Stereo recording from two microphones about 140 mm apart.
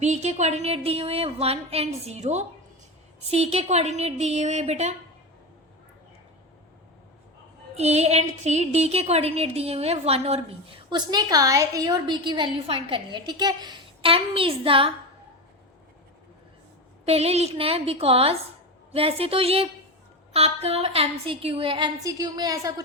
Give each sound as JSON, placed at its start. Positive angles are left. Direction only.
{"t": 0.0, "sound": "a woman's voice", "side_deg": -55}
{"t": 7.8, "sound": "a woman's voice", "side_deg": -50}
{"t": 10.8, "sound": "a woman's voice", "side_deg": -30}
{"t": 17.1, "sound": "a woman's voice", "side_deg": -45}